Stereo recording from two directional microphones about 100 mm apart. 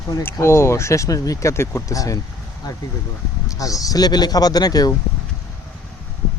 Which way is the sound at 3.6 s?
35° left (ahead or behind).